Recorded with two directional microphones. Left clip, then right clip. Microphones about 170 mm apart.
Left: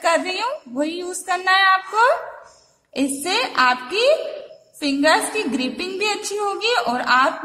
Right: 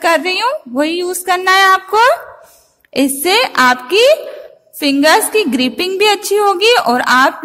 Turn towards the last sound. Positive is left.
turn(degrees=-50)  # may be behind; listen again after turning